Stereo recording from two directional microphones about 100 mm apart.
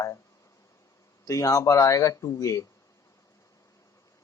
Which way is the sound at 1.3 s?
35° left (ahead or behind).